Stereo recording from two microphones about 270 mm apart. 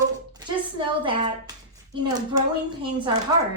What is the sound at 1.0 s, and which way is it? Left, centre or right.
Speech, centre.